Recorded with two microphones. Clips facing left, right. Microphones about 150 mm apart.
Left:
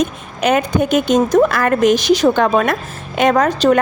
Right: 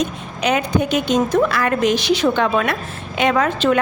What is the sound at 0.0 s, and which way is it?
A woman's voice, 50° left (ahead or behind).